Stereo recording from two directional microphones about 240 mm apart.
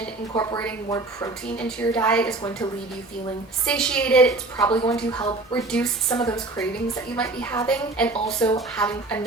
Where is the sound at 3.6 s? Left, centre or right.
Centre.